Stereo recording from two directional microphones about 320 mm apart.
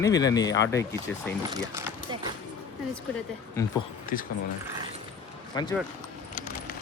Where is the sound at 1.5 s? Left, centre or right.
Centre.